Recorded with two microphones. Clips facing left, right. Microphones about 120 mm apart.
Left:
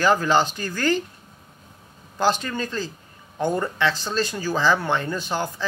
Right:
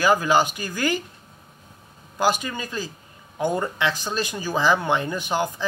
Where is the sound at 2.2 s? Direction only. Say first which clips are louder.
Left 1 dB; 10° right (ahead or behind).